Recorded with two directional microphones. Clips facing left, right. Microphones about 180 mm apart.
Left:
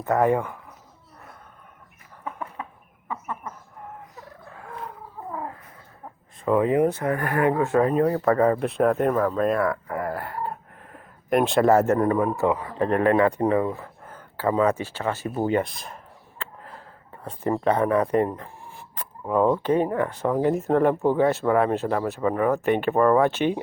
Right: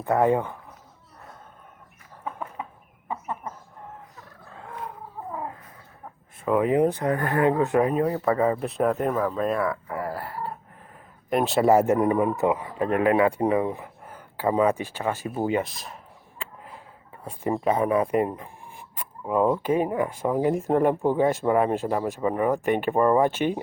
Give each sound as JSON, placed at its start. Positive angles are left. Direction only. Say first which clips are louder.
{"t": 0.0, "sound": "speech", "louder": "even", "side_deg": -10}
{"t": 3.1, "sound": "chicken", "louder": "right 1 dB", "side_deg": -25}
{"t": 6.4, "sound": "speech", "louder": "left 1 dB", "side_deg": -15}
{"t": 10.1, "sound": "a sound", "louder": "left 2 dB", "side_deg": -5}
{"t": 11.3, "sound": "speech", "louder": "left 1 dB", "side_deg": 0}
{"t": 12.8, "sound": "speech", "louder": "left 1 dB", "side_deg": -5}
{"t": 16.4, "sound": "a sound", "louder": "left 1 dB", "side_deg": -10}
{"t": 17.2, "sound": "speech", "louder": "left 1 dB", "side_deg": -10}